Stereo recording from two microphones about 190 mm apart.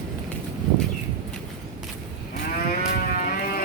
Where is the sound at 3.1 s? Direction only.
45° left (ahead or behind).